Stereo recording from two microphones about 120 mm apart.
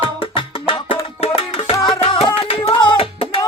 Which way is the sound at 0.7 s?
45° left (ahead or behind).